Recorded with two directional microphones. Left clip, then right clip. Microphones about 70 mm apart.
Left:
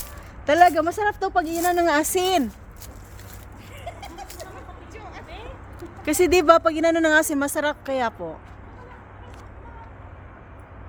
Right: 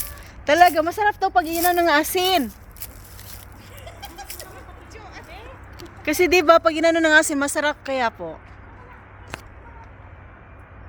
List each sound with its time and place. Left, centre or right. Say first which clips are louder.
0.4 s speech: right 1 dB; centre
3.8 s bird: left 2 dB; left
6.0 s speech: right 1 dB; centre
6.6 s speech: right 2 dB; right